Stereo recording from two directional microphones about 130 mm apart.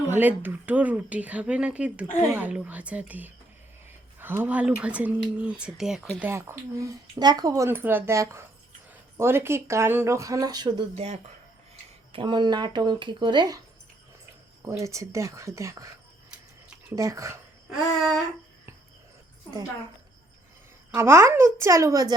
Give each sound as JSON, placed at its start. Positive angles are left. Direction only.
{"t": 0.1, "sound": "speech", "side_deg": -15}
{"t": 6.2, "sound": "speech", "side_deg": -20}
{"t": 10.9, "sound": "speech", "side_deg": -55}
{"t": 12.1, "sound": "speech", "side_deg": -35}
{"t": 14.6, "sound": "speech", "side_deg": -25}
{"t": 16.9, "sound": "speech", "side_deg": -25}
{"t": 20.9, "sound": "speech", "side_deg": -20}